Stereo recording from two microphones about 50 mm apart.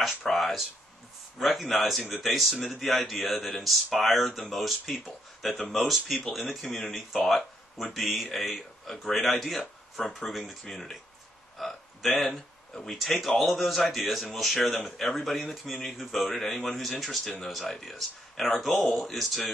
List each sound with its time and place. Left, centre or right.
0.0 s speech: centre